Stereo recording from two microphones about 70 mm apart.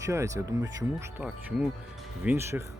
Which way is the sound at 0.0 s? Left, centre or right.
Right.